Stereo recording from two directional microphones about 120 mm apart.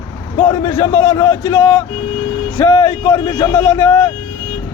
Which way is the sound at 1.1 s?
40° left (ahead or behind).